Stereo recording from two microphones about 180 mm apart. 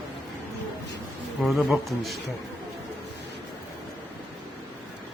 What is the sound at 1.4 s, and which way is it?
Speech, centre (ahead or behind).